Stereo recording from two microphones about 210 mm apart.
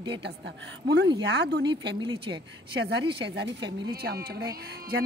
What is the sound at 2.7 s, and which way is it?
A woman's voice, 55° right (ahead or behind).